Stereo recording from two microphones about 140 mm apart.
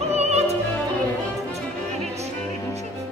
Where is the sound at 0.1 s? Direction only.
50° right (ahead or behind).